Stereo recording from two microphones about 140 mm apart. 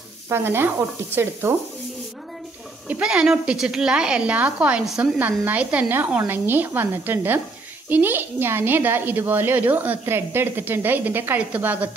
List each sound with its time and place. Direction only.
0.3 s a woman's voice: 15° right (ahead or behind)
2.9 s a woman's voice: 5° right (ahead or behind)